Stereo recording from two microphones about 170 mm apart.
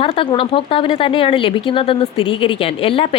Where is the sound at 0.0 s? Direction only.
30° left (ahead or behind).